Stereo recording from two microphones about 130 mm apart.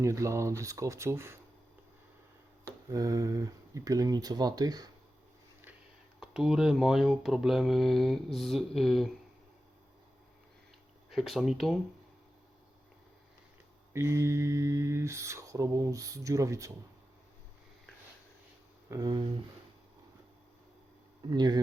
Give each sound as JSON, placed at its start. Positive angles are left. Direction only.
{"t": 0.0, "sound": "speech", "side_deg": -25}
{"t": 2.6, "sound": "speech", "side_deg": -25}
{"t": 6.1, "sound": "speech", "side_deg": 0}
{"t": 11.1, "sound": "speech", "side_deg": 0}
{"t": 13.9, "sound": "speech", "side_deg": -20}
{"t": 18.9, "sound": "speech", "side_deg": -30}
{"t": 21.2, "sound": "speech", "side_deg": -35}